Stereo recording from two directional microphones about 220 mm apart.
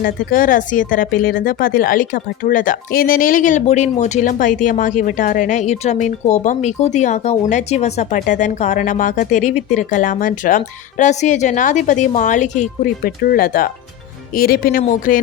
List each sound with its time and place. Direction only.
0.0 s speech: 40° left (ahead or behind)